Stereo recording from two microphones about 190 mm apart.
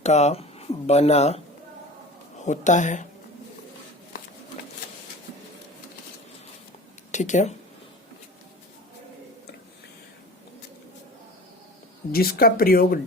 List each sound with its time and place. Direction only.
0.0 s speech: 35° left (ahead or behind)
2.4 s a woman's voice: 40° left (ahead or behind)
7.1 s speech: 40° left (ahead or behind)
12.1 s speech: 50° left (ahead or behind)